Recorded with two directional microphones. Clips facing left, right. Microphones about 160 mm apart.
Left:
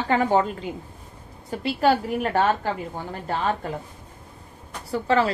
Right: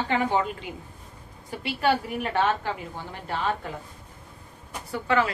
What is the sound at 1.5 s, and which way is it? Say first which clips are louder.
A woman's voice: left 4 dB; 40° left (ahead or behind).